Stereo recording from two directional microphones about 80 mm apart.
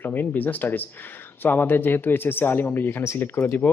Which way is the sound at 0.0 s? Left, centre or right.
Left.